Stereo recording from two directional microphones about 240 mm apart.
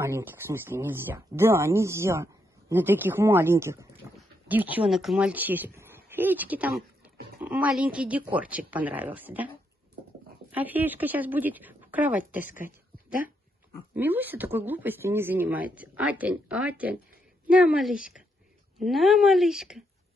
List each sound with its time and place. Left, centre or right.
0.0 s speech: centre
4.0 s goat: centre
4.5 s a woman's voice: centre
10.5 s speech: centre
13.9 s speech: centre